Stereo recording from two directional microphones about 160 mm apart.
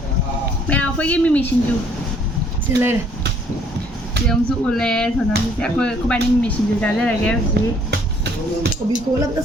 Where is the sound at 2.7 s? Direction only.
15° right (ahead or behind).